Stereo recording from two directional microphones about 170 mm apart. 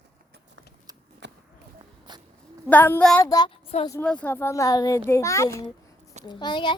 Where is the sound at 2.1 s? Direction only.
25° right (ahead or behind).